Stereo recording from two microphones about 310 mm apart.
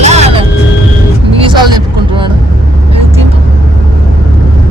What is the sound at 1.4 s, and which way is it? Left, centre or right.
Vehicle, centre.